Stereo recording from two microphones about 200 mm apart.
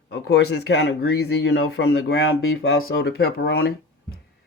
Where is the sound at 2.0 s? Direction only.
55° left (ahead or behind).